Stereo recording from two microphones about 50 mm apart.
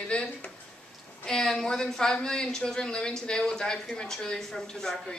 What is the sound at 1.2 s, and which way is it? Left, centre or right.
A woman's voice, centre.